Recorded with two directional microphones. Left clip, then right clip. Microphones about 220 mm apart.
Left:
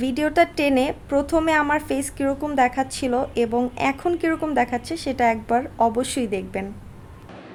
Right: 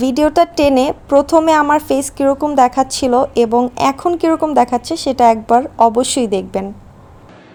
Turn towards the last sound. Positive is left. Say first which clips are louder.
# right 9 dB
turn(degrees=-20)  # may be behind; listen again after turning